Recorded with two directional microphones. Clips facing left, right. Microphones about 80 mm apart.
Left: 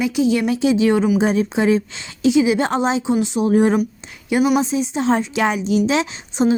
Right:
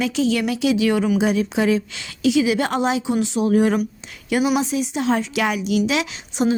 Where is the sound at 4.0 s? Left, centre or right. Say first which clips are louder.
Left 2 dB; left.